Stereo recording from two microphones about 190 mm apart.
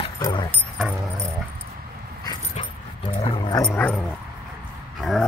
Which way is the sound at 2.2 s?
25° left (ahead or behind).